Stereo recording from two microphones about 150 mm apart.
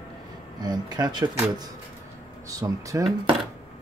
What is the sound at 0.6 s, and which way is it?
Speech, 25° right (ahead or behind).